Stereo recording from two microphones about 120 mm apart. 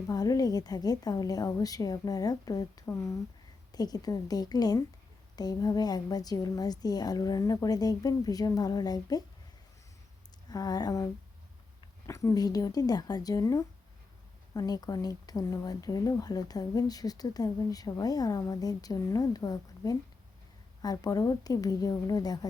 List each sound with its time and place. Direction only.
0.1 s speech: 30° left (ahead or behind)
10.5 s speech: 35° left (ahead or behind)